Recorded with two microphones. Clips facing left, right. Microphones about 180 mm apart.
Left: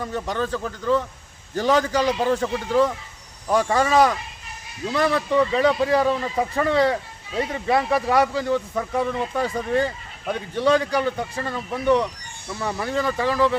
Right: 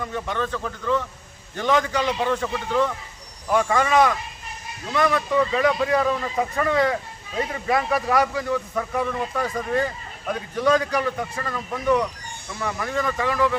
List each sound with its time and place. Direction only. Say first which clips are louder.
0.0 s a man's voice: left 1 dB; 35° left (ahead or behind)